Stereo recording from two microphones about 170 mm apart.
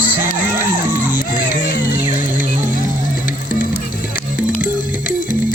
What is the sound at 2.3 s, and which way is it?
Music, 50° right (ahead or behind).